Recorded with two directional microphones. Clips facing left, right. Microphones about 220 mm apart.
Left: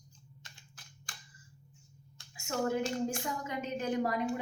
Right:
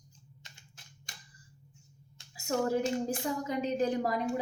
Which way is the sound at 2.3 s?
35° right (ahead or behind).